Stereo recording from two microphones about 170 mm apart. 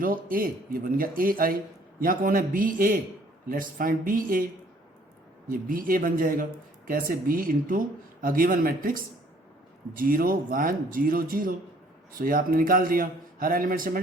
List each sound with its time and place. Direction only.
0.0 s speech: 55° right (ahead or behind)
5.5 s speech: 55° right (ahead or behind)